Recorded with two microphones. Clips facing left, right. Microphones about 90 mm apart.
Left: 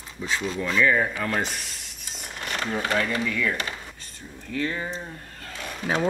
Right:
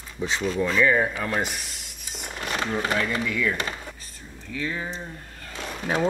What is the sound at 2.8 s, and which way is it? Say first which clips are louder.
Speech: left 2 dB; 10° right (ahead or behind).